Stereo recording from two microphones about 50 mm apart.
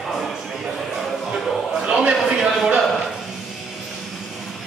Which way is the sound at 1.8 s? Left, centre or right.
Centre.